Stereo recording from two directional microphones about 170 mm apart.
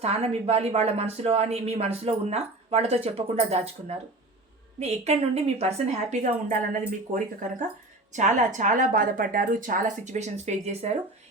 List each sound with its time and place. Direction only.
0.0 s speech: 40° right (ahead or behind)
8.1 s a woman's voice: 45° right (ahead or behind)